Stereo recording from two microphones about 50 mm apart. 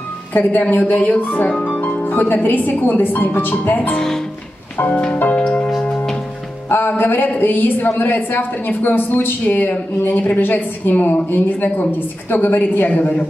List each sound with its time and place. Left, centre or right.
0.3 s a woman's voice: left
3.9 s speech: centre
4.9 s music: left
5.4 s church bell: left
6.7 s a woman's voice: left